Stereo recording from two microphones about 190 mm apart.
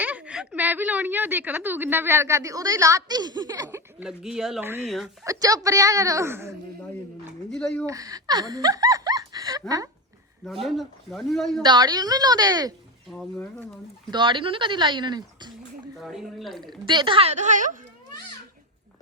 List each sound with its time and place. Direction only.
0.0 s a woman's voice: 10° right (ahead or behind)
4.0 s a man's voice: 5° right (ahead or behind)
5.2 s a woman's voice: 15° right (ahead or behind)
7.5 s a man's voice: 5° left (ahead or behind)
7.9 s speech: 15° right (ahead or behind)
10.4 s a man's voice: centre (ahead or behind)
11.6 s speech: 20° right (ahead or behind)
13.1 s a man's voice: 5° left (ahead or behind)
14.1 s speech: 25° right (ahead or behind)
16.0 s a man's voice: centre (ahead or behind)
16.6 s speech: 25° right (ahead or behind); by 17.7 s 40° right (ahead or behind)